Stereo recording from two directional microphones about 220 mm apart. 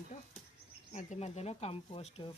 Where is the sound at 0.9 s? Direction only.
30° left (ahead or behind).